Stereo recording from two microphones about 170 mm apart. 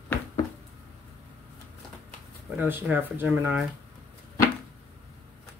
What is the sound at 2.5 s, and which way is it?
Speech, 10° right (ahead or behind).